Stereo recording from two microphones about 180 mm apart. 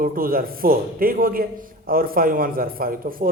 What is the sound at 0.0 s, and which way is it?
A man's voice, 55° right (ahead or behind).